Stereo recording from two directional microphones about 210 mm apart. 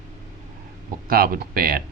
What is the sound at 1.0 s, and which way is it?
Speech, 45° right (ahead or behind).